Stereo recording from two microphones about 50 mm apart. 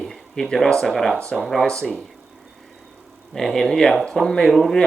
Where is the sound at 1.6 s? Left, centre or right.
Centre.